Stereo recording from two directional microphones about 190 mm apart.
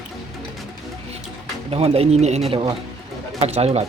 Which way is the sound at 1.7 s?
30° right (ahead or behind).